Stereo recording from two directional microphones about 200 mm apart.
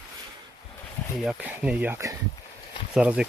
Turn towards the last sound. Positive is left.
turn(degrees=-5)  # may be behind; listen again after turning